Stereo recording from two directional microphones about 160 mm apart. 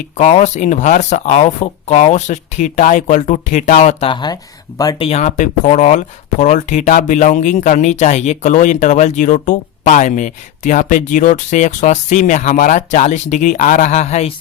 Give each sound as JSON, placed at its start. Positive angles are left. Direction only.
{"t": 0.2, "sound": "speech", "side_deg": 45}
{"t": 4.1, "sound": "speech", "side_deg": 25}
{"t": 4.9, "sound": "speech", "side_deg": 40}